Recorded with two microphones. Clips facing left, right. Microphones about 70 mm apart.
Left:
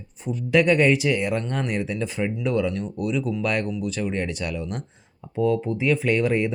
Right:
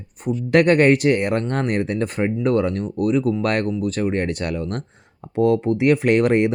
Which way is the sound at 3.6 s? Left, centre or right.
Right.